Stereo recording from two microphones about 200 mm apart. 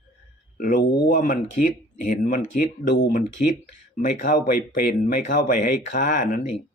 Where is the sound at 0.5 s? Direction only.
45° left (ahead or behind).